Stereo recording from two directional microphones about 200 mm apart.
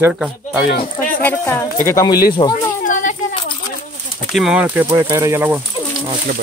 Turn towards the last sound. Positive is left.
turn(degrees=-10)  # may be behind; listen again after turning